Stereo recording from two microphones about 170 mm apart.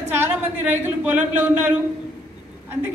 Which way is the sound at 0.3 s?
10° right (ahead or behind).